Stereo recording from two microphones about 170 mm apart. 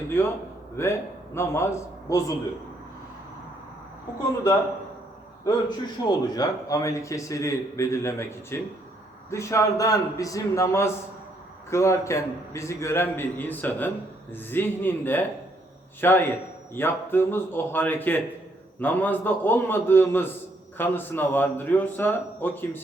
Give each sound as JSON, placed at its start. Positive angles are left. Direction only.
{"t": 0.1, "sound": "a man's voice", "side_deg": 15}
{"t": 5.5, "sound": "a man's voice", "side_deg": 25}